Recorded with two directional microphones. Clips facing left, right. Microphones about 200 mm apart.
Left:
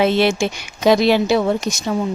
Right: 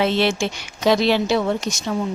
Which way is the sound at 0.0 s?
10° left (ahead or behind).